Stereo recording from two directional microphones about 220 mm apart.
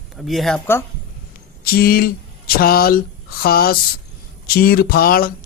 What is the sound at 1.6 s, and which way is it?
Speech, 40° left (ahead or behind).